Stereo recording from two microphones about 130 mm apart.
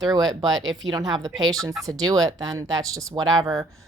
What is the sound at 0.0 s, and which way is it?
Speech, 30° right (ahead or behind).